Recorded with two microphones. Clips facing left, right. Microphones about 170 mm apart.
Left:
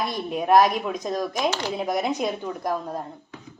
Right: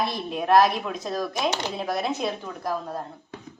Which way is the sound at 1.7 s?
15° left (ahead or behind).